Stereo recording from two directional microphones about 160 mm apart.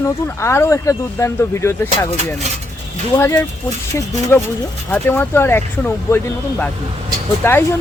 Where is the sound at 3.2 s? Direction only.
15° left (ahead or behind).